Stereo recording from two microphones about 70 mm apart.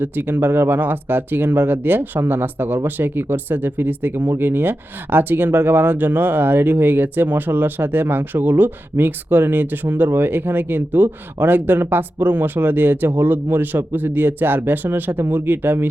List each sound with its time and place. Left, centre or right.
0.0 s speech: right